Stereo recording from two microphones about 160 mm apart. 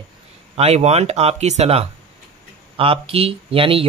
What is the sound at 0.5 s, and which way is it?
Speech, 40° right (ahead or behind).